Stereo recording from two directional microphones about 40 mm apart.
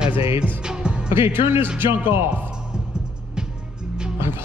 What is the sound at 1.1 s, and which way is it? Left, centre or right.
Speech, right.